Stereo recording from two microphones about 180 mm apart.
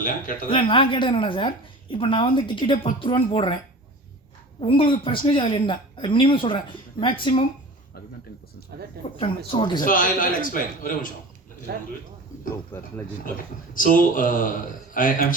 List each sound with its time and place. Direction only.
0.0 s a man's voice: 50° left (ahead or behind)
0.5 s a woman's voice: 30° left (ahead or behind)
4.6 s a woman's voice: 30° left (ahead or behind)
8.7 s speech: 65° right (ahead or behind)
9.5 s a woman's voice: 25° left (ahead or behind)
9.8 s a man's voice: 50° left (ahead or behind)
11.7 s speech: 65° right (ahead or behind)
12.7 s speech: 10° left (ahead or behind)
13.7 s a man's voice: 50° left (ahead or behind)